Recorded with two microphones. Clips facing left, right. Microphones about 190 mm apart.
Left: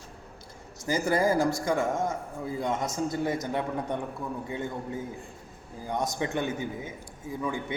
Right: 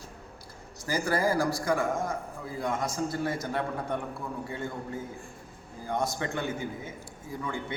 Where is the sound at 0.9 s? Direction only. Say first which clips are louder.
Left 2 dB; 20° left (ahead or behind).